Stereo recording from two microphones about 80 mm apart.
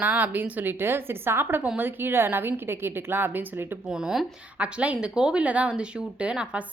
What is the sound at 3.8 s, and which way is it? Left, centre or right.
Speech, centre.